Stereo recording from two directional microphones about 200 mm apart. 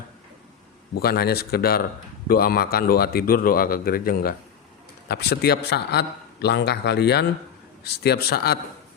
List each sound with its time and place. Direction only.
0.9 s a man's voice: 50° left (ahead or behind)